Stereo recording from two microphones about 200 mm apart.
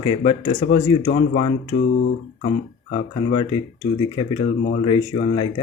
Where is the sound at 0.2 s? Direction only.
30° left (ahead or behind).